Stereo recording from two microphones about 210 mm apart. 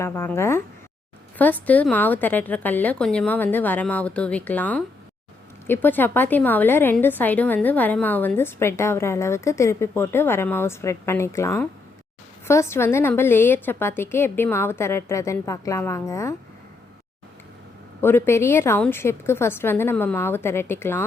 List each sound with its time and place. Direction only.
0.0 s a woman's voice: 10° left (ahead or behind)
18.0 s a woman's voice: 10° left (ahead or behind)